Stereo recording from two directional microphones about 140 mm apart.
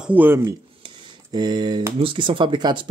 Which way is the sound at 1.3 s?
30° right (ahead or behind).